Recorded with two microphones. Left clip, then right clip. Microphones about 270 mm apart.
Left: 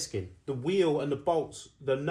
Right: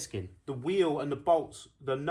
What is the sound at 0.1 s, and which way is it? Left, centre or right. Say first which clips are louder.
Speech: left 3 dB; centre.